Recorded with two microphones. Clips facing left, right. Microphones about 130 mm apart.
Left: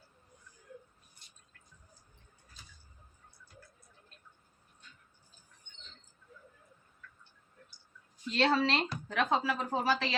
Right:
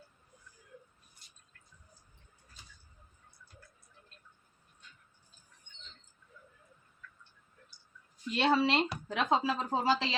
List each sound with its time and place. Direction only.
8.3 s speech: 10° right (ahead or behind)